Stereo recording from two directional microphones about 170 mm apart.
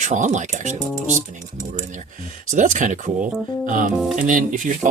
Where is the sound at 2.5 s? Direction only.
50° right (ahead or behind).